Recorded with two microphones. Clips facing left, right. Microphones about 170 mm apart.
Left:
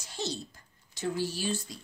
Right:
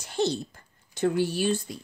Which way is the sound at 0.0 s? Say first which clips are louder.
Right 10 dB; 60° right (ahead or behind).